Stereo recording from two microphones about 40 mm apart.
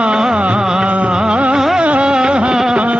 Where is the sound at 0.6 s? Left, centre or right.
Centre.